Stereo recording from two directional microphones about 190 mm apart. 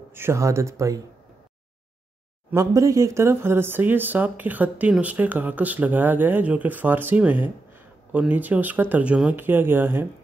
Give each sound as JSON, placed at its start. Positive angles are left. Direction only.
{"t": 0.1, "sound": "speech", "side_deg": -15}
{"t": 2.5, "sound": "speech", "side_deg": -15}